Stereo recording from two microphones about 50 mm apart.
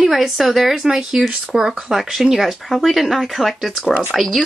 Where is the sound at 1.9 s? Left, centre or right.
Centre.